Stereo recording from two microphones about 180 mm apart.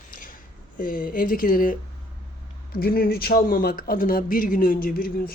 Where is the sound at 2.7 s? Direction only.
55° left (ahead or behind).